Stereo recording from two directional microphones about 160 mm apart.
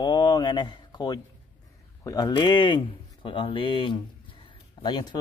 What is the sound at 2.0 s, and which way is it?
Speech, 25° left (ahead or behind).